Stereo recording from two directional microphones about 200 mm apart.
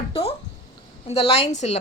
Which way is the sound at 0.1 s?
30° left (ahead or behind).